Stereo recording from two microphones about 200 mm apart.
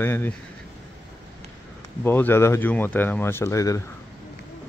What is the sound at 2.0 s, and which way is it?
Speech, 10° left (ahead or behind).